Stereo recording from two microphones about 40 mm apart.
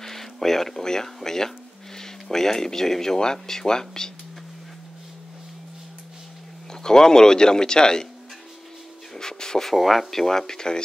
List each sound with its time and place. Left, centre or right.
0.0 s speech: centre
6.7 s speech: centre
9.1 s speech: centre